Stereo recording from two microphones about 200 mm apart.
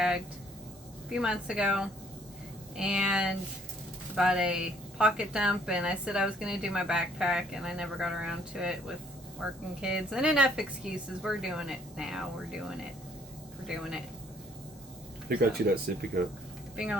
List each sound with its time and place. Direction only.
1.1 s a woman's voice: 5° right (ahead or behind)
15.3 s speech: 50° right (ahead or behind)
16.7 s speech: 5° right (ahead or behind)